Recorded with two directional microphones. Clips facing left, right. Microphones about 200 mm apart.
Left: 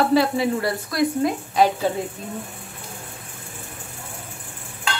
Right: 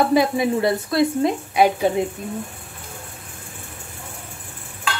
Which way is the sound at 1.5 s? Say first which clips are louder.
Right 2 dB; 15° right (ahead or behind).